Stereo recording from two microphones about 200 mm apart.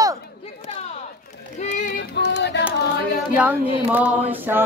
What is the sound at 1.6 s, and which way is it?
Child singing, 35° left (ahead or behind).